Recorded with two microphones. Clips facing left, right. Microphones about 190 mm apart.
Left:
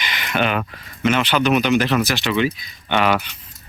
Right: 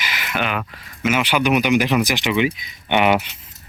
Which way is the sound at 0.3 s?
35° left (ahead or behind).